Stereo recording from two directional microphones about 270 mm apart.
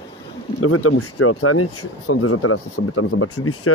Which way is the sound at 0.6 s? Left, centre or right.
Left.